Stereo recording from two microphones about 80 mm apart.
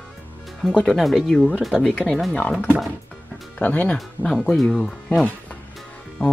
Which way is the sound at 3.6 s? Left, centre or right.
Centre.